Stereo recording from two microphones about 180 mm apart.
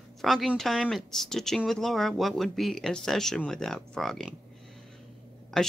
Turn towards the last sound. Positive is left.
turn(degrees=0)  # may be behind; listen again after turning